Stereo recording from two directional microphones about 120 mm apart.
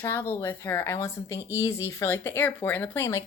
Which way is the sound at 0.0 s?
20° left (ahead or behind).